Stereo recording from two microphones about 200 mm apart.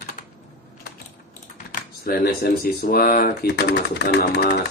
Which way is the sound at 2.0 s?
50° left (ahead or behind).